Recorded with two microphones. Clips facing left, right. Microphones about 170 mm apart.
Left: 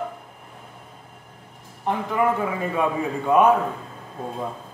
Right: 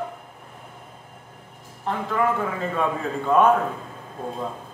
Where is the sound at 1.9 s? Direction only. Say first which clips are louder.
Left 2 dB; 15° left (ahead or behind).